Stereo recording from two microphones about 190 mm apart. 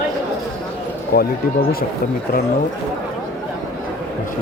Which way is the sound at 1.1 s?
55° left (ahead or behind).